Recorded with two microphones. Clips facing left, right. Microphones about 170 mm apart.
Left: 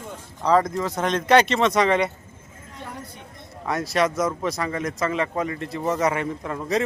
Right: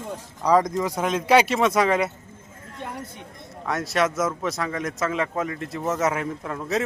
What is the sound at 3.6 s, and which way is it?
Speech, centre (ahead or behind).